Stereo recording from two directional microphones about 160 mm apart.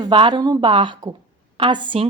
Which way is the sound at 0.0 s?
30° right (ahead or behind).